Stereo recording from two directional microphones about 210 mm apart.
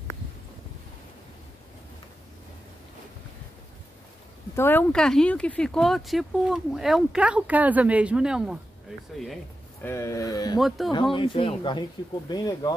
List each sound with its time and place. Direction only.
4.6 s speech: 10° left (ahead or behind)
9.8 s speech: 15° left (ahead or behind)